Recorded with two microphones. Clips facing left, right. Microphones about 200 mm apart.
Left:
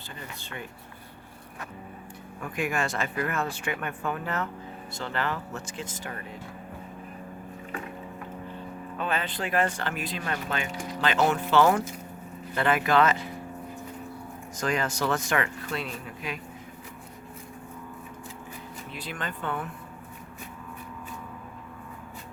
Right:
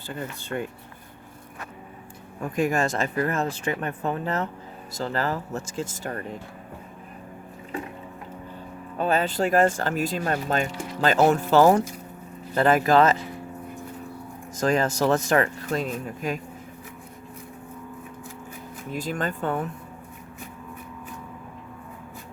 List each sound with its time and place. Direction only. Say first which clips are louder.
0.1 s speech: right 10 dB; 50° right (ahead or behind)
2.4 s speech: right 6 dB; 40° right (ahead or behind)
9.0 s speech: right 8 dB; 40° right (ahead or behind)
14.6 s speech: right 6 dB; 40° right (ahead or behind)
18.9 s speech: right 9 dB; 45° right (ahead or behind)